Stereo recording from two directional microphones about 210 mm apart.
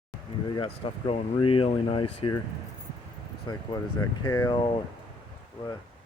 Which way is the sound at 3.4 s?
20° left (ahead or behind).